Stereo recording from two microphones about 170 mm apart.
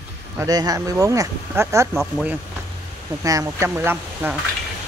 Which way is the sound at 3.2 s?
20° right (ahead or behind).